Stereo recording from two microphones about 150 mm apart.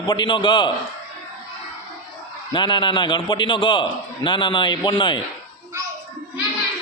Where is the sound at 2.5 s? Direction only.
30° left (ahead or behind).